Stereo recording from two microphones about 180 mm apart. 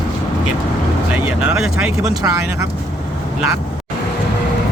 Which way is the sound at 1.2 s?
5° right (ahead or behind).